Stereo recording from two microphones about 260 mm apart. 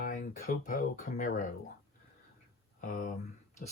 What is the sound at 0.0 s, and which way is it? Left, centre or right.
Speech, left.